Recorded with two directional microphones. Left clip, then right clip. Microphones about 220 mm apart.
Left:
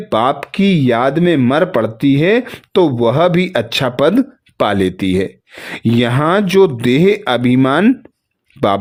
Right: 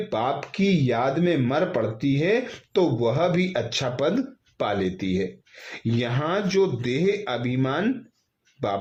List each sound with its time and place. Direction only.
0.1 s a man's voice: 50° left (ahead or behind)